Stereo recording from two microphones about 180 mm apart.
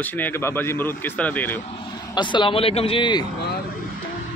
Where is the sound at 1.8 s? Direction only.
25° left (ahead or behind).